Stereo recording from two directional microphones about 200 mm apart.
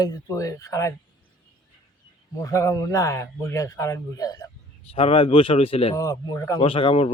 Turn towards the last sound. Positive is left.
turn(degrees=25)  # may be behind; listen again after turning